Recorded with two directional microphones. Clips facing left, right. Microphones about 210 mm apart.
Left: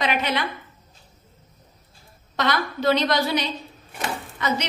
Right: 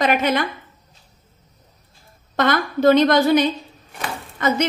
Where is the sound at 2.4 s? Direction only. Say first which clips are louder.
Right 6 dB; 50° right (ahead or behind).